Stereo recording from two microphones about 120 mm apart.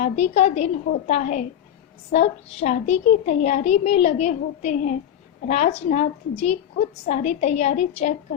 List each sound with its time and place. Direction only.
0.0 s a woman's voice: 70° left (ahead or behind); by 1.5 s 85° left
2.1 s a woman's voice: 65° left (ahead or behind); by 4.9 s 90° left
5.5 s a woman's voice: 70° left (ahead or behind)